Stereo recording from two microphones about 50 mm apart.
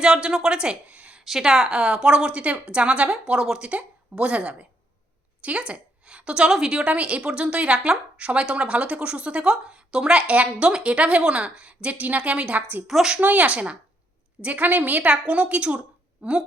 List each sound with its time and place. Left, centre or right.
0.0 s speech: centre
0.9 s a sound: right
1.2 s a woman's voice: centre; by 4.5 s right
5.4 s a sound: right
6.5 s speech: centre
6.8 s a woman's voice: right
12.9 s speech: centre
13.1 s a woman's voice: right